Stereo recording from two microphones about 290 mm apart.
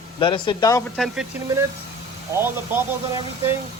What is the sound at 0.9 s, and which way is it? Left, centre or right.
Speech, centre.